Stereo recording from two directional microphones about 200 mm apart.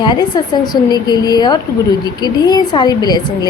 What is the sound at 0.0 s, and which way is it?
Speech, 20° left (ahead or behind).